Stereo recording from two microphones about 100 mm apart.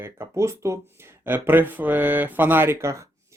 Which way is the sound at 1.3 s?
20° right (ahead or behind).